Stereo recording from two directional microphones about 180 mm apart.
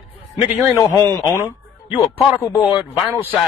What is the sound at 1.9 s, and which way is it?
Speech, 30° left (ahead or behind).